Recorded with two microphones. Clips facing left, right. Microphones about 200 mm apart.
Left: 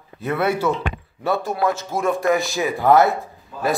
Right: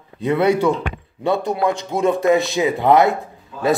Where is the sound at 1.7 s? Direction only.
20° right (ahead or behind).